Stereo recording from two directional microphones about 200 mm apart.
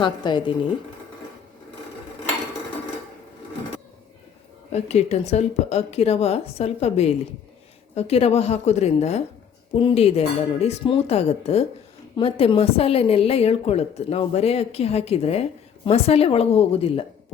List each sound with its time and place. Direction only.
0.0 s a woman's voice: 20° left (ahead or behind)
4.7 s a woman's voice: 35° left (ahead or behind)